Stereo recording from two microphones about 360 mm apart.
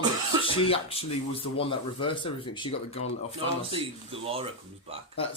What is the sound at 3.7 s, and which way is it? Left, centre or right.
Speech, centre.